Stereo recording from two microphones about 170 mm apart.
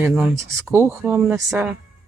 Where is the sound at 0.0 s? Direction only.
5° right (ahead or behind).